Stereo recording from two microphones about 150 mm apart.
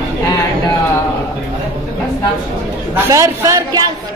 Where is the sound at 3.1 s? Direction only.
20° right (ahead or behind).